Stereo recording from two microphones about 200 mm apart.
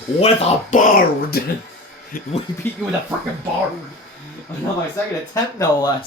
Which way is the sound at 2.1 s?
45° left (ahead or behind).